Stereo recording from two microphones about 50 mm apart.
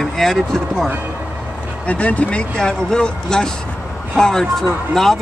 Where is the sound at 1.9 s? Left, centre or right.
Left.